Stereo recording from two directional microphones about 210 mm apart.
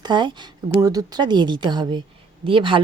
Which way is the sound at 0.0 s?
20° right (ahead or behind).